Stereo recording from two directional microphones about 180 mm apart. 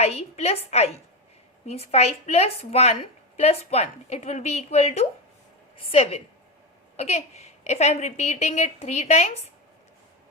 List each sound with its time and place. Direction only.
0.0 s a woman's voice: 35° left (ahead or behind)